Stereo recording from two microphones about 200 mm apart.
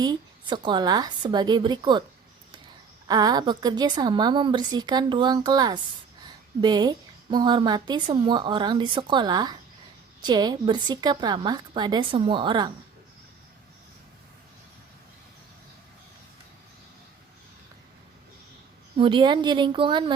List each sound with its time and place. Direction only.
0.0 s a woman's voice: 20° right (ahead or behind)
3.1 s a woman's voice: 20° right (ahead or behind)
18.9 s a woman's voice: 25° right (ahead or behind)